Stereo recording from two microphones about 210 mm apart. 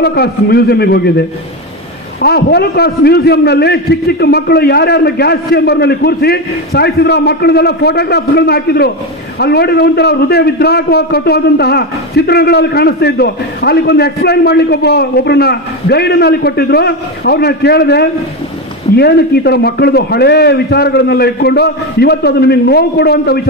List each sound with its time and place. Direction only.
0.0 s a man's voice: 50° left (ahead or behind)
2.2 s a man's voice: 50° left (ahead or behind)